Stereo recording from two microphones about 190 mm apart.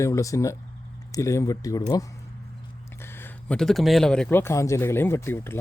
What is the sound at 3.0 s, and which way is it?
Speech, 10° left (ahead or behind).